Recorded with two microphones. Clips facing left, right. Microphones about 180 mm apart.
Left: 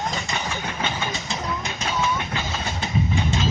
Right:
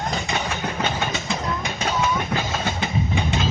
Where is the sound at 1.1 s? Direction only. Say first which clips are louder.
Right 2 dB; 55° right (ahead or behind).